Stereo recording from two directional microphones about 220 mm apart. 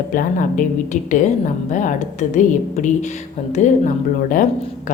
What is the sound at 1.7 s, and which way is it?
A woman's voice, 35° left (ahead or behind).